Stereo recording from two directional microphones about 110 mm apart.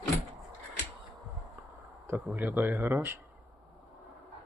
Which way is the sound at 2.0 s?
20° right (ahead or behind).